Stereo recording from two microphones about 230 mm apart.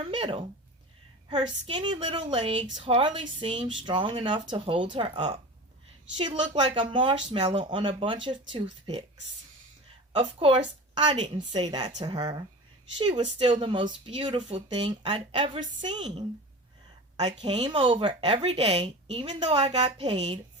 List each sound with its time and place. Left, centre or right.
0.0 s speech: right
10.1 s speech: right
17.4 s speech: right